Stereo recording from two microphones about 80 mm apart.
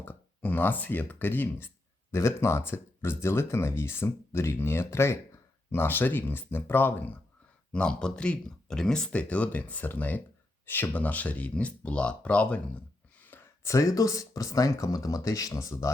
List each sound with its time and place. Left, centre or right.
0.0 s speech: left
7.7 s speech: centre
13.2 s speech: left